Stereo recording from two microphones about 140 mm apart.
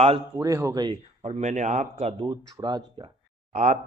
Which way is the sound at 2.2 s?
30° right (ahead or behind).